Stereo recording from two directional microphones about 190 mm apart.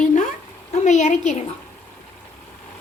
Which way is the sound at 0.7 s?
40° left (ahead or behind).